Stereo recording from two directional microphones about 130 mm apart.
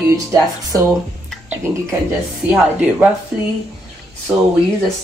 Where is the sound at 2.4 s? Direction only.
10° right (ahead or behind).